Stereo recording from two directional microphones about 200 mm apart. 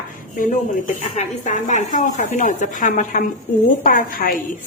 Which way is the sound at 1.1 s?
40° left (ahead or behind).